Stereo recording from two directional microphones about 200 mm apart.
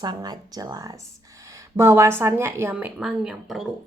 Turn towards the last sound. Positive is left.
turn(degrees=0)  # may be behind; listen again after turning